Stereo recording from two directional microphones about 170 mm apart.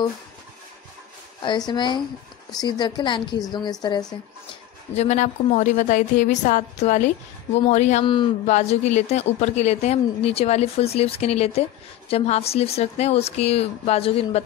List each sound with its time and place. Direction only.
1.4 s a woman's voice: 25° left (ahead or behind)
4.9 s a woman's voice: 45° left (ahead or behind)
8.0 s a woman's voice: 30° left (ahead or behind)
8.5 s speech: 40° left (ahead or behind)